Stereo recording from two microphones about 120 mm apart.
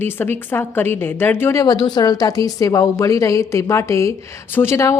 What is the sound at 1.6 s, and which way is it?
A woman's voice, 35° left (ahead or behind).